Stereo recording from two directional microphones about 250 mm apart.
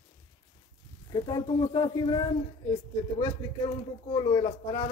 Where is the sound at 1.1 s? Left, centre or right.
Centre.